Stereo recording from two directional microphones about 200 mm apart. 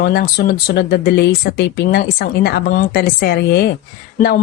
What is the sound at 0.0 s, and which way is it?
Speech, 50° left (ahead or behind).